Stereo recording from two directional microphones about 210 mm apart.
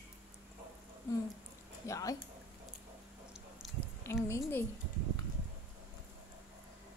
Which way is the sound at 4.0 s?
15° left (ahead or behind).